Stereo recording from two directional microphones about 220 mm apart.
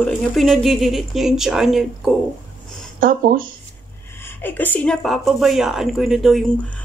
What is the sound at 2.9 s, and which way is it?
Speech, 40° right (ahead or behind).